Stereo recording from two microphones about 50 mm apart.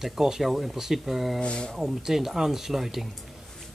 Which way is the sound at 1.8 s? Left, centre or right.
Centre.